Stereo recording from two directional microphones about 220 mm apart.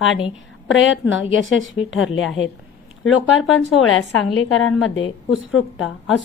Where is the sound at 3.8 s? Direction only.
70° left (ahead or behind).